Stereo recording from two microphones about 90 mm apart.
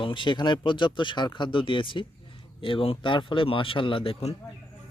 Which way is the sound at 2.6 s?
85° left.